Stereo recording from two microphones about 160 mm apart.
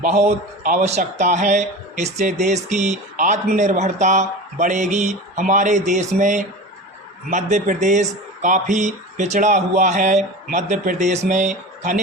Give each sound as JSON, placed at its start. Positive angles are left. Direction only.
{"t": 0.0, "sound": "speech", "side_deg": -50}